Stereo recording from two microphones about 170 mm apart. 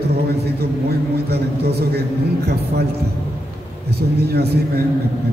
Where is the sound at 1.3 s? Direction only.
65° right (ahead or behind).